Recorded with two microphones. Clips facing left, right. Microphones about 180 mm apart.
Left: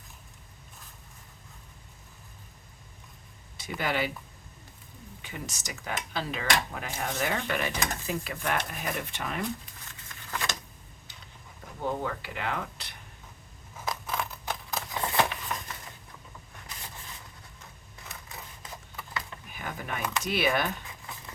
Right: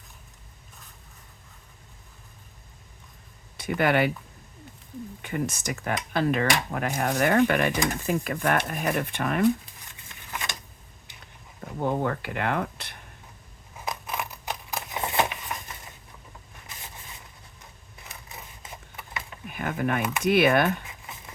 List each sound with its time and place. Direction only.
3.6 s speech: 60° right (ahead or behind)
5.2 s speech: 55° right (ahead or behind)
11.8 s speech: 55° right (ahead or behind)
13.8 s scissors: 15° right (ahead or behind)
18.3 s a sound: 20° right (ahead or behind)
19.5 s a sound: 55° right (ahead or behind)
20.2 s speech: 55° right (ahead or behind)